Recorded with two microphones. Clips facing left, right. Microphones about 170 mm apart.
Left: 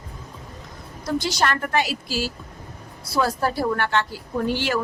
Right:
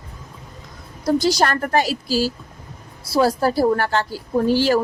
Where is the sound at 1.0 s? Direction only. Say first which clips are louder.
Right 5 dB; 35° right (ahead or behind).